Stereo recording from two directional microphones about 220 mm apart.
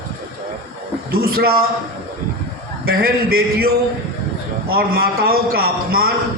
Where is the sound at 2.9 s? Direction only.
45° right (ahead or behind).